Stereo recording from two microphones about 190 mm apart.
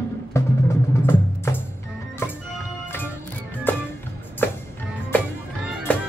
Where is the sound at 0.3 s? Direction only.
15° left (ahead or behind).